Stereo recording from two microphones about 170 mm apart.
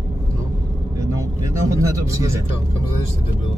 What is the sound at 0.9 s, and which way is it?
Vehicle, 20° right (ahead or behind).